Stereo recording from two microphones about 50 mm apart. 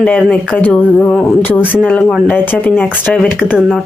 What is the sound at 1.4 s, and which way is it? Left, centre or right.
Speech, left.